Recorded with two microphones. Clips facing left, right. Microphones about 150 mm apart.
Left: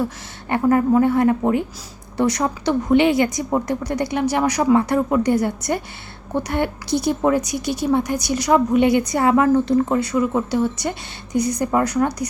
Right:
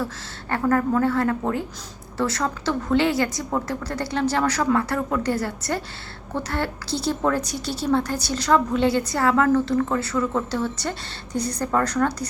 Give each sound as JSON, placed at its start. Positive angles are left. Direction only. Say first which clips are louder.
{"t": 0.5, "sound": "a woman's voice", "louder": "left 5 dB", "side_deg": 20}